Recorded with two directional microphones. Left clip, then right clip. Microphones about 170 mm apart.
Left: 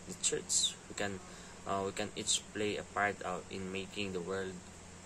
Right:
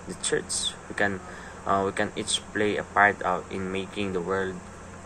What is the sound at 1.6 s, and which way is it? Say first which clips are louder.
Speech: right 12 dB; 15° left (ahead or behind).